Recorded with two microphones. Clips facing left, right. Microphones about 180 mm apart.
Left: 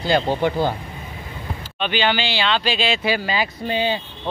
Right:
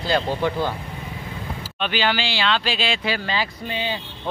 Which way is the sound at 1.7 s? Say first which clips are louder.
Left 2 dB; centre (ahead or behind).